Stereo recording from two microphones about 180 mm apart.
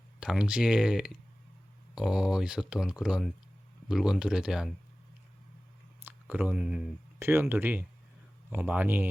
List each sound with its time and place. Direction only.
0.2 s speech: 5° right (ahead or behind)
6.1 s speech: 10° right (ahead or behind)